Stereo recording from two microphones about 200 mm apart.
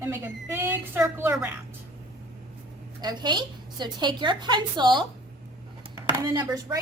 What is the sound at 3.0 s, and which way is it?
A woman's voice, 20° right (ahead or behind).